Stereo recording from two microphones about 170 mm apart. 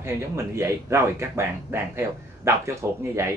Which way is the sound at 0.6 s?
15° right (ahead or behind).